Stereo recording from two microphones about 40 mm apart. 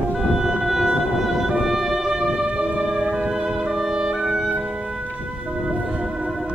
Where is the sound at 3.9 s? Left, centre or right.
Centre.